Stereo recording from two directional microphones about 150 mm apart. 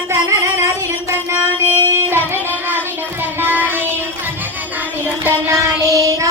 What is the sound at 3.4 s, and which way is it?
Child singing, 15° right (ahead or behind).